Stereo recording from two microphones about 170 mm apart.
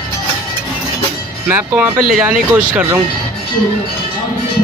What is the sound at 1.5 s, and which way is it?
Speech, 10° right (ahead or behind).